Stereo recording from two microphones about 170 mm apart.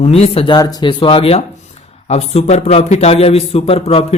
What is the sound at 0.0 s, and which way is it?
A man's voice, 35° left (ahead or behind).